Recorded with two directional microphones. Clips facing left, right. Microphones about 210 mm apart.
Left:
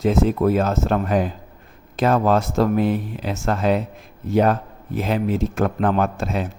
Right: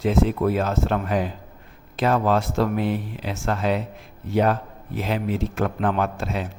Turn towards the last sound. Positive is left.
turn(degrees=45)  # may be behind; listen again after turning